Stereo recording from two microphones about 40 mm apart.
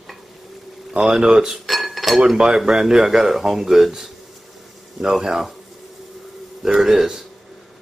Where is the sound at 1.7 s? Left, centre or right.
Centre.